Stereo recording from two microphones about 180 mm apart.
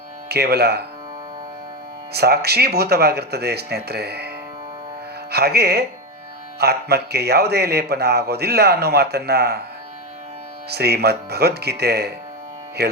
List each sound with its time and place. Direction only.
0.3 s speech: 65° right (ahead or behind)
2.1 s speech: 60° right (ahead or behind)
5.3 s speech: 60° right (ahead or behind)
10.7 s speech: 65° right (ahead or behind)